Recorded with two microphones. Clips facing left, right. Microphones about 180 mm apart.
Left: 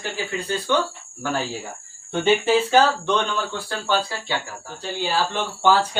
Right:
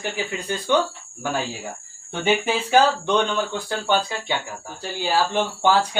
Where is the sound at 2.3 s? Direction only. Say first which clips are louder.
Left 3 dB; 15° right (ahead or behind).